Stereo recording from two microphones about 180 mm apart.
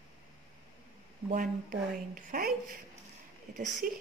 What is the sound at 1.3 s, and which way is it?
A woman's voice, 45° right (ahead or behind).